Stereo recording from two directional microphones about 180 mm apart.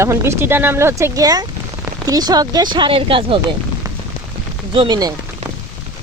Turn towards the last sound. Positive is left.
turn(degrees=-25)  # may be behind; listen again after turning